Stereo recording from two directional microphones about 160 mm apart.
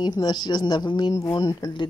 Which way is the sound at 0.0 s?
25° left (ahead or behind).